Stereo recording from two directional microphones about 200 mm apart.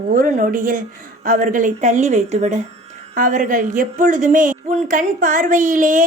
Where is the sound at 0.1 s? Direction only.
45° right (ahead or behind).